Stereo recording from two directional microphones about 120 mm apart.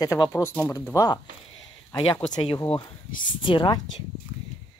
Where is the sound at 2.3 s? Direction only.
35° left (ahead or behind).